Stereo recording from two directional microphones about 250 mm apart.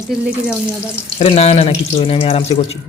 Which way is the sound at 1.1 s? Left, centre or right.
Left.